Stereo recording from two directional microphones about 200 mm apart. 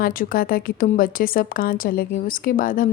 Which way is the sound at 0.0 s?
45° left (ahead or behind).